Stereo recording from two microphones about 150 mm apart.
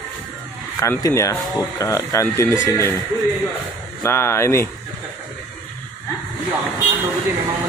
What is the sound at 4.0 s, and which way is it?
Speech, 15° left (ahead or behind).